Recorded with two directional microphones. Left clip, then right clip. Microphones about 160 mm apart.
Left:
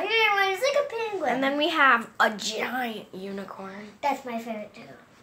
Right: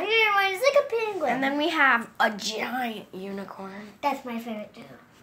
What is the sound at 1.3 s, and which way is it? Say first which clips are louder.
A woman's voice: left 3 dB; 15° left (ahead or behind).